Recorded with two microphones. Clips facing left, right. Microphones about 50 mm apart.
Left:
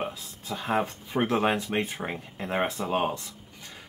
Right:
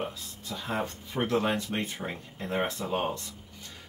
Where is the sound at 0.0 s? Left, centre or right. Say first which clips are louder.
Left 2 dB; left.